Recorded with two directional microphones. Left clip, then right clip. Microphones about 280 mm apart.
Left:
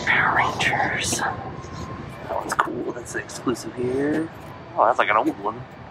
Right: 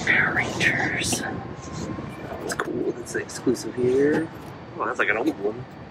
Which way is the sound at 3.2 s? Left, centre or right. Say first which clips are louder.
Right 3 dB; left.